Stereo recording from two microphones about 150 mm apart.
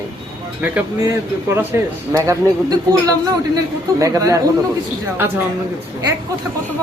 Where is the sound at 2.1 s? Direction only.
20° right (ahead or behind).